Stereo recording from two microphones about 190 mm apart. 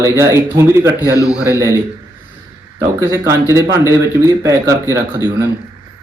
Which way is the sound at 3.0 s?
15° right (ahead or behind).